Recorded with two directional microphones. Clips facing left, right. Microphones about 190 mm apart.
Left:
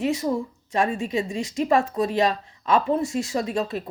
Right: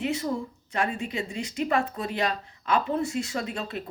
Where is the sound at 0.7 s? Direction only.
25° left (ahead or behind).